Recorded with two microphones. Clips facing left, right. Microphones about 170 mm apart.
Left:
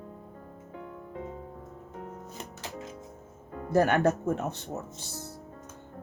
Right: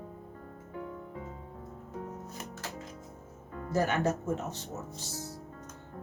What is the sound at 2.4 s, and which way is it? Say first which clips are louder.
Music: even; 20° left (ahead or behind).